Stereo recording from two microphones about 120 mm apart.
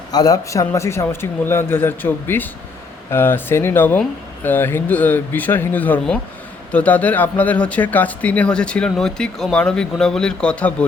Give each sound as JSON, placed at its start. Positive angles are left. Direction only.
{"t": 0.1, "sound": "speech", "side_deg": 30}